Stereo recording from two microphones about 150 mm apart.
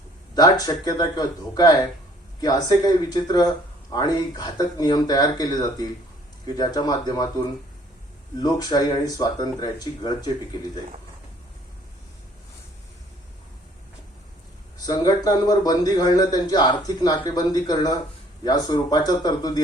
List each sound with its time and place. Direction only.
0.3 s speech: 25° left (ahead or behind)
8.4 s speech: 25° left (ahead or behind)
14.8 s speech: 25° left (ahead or behind)